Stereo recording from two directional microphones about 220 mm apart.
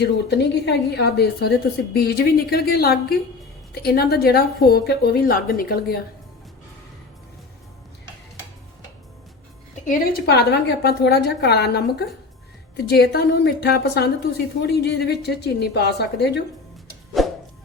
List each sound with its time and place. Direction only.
0.0 s a woman's voice: 50° left (ahead or behind)
9.8 s a woman's voice: 40° left (ahead or behind)
17.2 s a sound: centre (ahead or behind)